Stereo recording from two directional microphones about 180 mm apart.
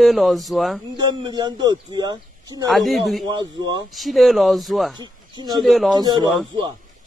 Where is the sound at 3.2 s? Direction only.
25° right (ahead or behind).